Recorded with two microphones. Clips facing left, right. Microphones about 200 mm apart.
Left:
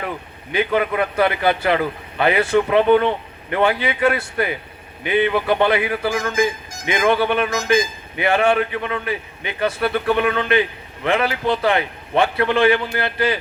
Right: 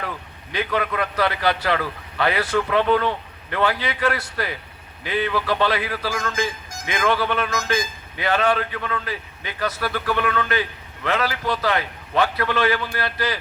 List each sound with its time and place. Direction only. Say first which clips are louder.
0.0 s speech: left 4 dB; 25° left (ahead or behind)